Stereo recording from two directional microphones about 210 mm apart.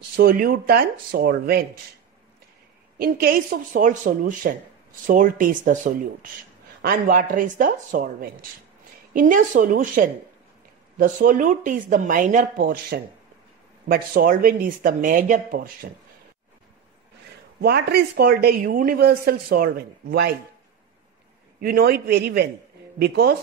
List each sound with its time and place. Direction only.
0.1 s speech: 45° right (ahead or behind)
3.0 s speech: 45° right (ahead or behind)
17.6 s speech: 50° right (ahead or behind)
21.5 s speech: 45° right (ahead or behind)